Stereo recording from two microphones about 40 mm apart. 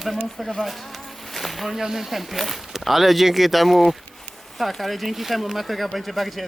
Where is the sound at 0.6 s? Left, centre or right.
Centre.